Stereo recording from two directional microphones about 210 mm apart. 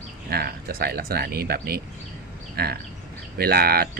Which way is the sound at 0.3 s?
45° right (ahead or behind).